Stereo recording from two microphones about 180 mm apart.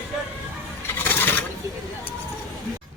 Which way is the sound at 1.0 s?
10° left (ahead or behind).